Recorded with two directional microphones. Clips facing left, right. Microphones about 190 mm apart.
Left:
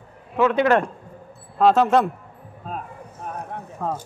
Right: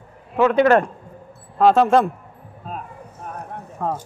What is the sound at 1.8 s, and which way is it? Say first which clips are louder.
Speech: right 2 dB; 35° right (ahead or behind).